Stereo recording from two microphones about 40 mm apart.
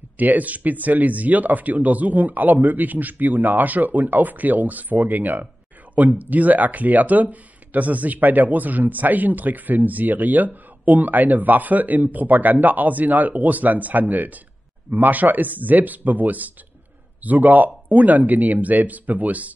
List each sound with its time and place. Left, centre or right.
0.2 s speech: right